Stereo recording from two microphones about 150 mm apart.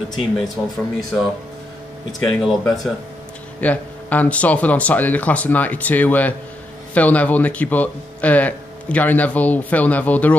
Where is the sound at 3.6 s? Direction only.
10° left (ahead or behind).